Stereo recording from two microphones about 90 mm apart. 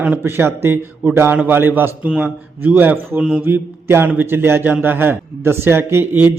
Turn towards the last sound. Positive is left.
turn(degrees=-25)  # may be behind; listen again after turning